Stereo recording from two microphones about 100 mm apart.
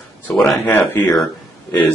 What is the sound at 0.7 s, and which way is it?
Speech, 20° left (ahead or behind).